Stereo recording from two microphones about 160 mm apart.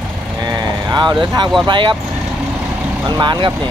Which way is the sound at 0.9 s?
25° right (ahead or behind).